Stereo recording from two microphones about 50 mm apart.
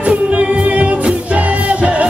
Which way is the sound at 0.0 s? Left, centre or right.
Right.